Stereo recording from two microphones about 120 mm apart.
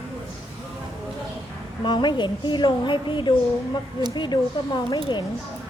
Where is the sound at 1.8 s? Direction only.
40° left (ahead or behind).